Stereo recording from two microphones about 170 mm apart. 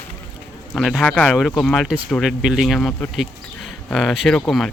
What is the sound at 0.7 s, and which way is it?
Speech, centre (ahead or behind).